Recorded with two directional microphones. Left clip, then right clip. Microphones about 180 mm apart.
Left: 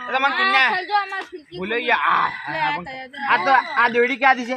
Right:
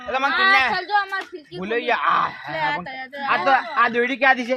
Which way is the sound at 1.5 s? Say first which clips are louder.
Left 2 dB; 60° right (ahead or behind).